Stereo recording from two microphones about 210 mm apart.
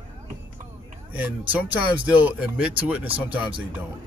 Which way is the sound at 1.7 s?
5° right (ahead or behind).